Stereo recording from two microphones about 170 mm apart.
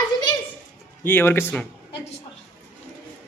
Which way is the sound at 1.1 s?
15° left (ahead or behind).